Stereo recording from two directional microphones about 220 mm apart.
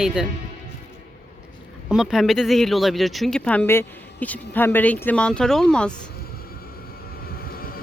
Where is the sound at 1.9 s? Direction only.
Centre (ahead or behind).